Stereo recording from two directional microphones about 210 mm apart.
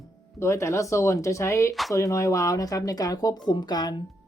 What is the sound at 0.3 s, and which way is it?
Speech, 15° left (ahead or behind).